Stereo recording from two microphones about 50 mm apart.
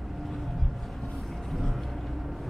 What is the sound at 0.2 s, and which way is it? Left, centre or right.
Vehicle, centre.